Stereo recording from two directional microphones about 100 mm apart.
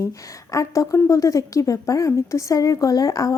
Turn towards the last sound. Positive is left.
turn(degrees=35)  # may be behind; listen again after turning